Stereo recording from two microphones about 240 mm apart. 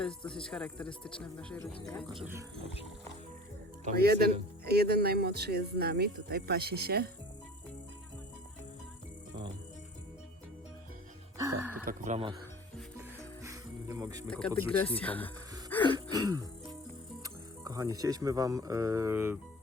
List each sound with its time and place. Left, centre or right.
0.0 s speech: centre
2.1 s speech: centre
3.8 s speech: right
11.3 s music: centre
11.9 s speech: right
13.0 s music: centre
14.3 s speech: centre
15.7 s throat clearing: centre
16.1 s music: centre
17.2 s speech: centre